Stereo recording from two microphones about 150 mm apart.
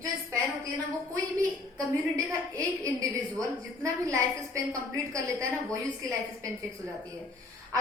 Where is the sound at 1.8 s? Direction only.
20° right (ahead or behind).